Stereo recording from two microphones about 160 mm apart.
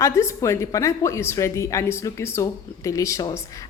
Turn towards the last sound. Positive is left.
turn(degrees=20)  # may be behind; listen again after turning